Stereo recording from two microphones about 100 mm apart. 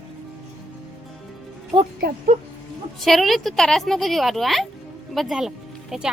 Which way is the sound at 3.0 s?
Centre (ahead or behind).